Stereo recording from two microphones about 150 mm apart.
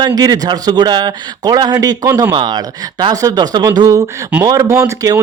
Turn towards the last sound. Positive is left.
turn(degrees=-20)  # may be behind; listen again after turning